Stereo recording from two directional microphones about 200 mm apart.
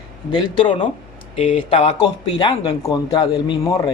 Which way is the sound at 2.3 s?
20° left (ahead or behind).